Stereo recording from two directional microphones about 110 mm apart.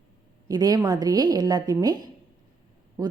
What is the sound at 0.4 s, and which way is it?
A woman's voice, 35° right (ahead or behind).